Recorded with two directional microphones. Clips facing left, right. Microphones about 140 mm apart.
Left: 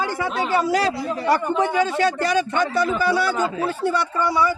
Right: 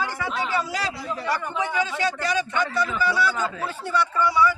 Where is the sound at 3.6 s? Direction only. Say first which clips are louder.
Left 4 dB; 45° left (ahead or behind).